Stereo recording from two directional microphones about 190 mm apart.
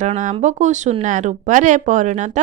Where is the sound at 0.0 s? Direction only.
35° right (ahead or behind).